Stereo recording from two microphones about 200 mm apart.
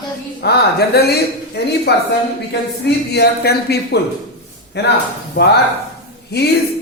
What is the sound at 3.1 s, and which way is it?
Speech, 55° left (ahead or behind).